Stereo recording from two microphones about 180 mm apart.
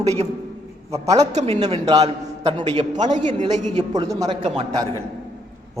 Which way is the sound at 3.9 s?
20° right (ahead or behind).